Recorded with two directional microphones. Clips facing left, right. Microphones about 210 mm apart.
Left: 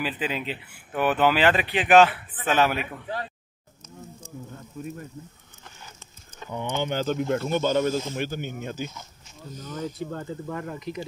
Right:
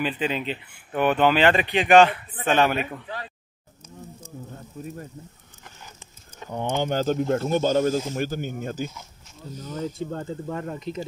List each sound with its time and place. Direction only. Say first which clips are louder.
0.0 s speech: right 3 dB; 5° left (ahead or behind)
6.5 s speech: right 3 dB; 40° right (ahead or behind)
9.6 s speech: right 2 dB; 35° right (ahead or behind)